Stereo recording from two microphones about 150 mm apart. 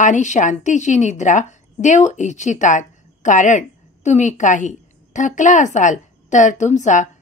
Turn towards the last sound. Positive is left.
turn(degrees=55)  # may be behind; listen again after turning